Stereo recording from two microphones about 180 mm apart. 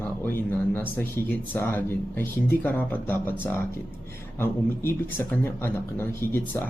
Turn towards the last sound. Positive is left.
turn(degrees=15)  # may be behind; listen again after turning